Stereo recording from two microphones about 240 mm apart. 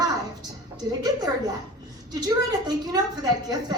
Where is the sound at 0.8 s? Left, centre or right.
Centre.